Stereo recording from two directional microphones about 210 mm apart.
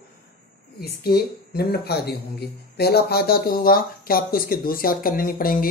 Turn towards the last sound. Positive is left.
turn(degrees=45)  # may be behind; listen again after turning